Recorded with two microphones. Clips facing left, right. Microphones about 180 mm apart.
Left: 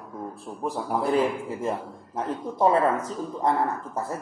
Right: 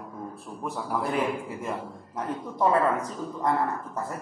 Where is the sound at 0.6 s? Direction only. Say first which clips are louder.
Left 4 dB; 35° left (ahead or behind).